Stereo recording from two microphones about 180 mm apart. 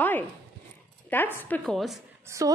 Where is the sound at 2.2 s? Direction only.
15° right (ahead or behind).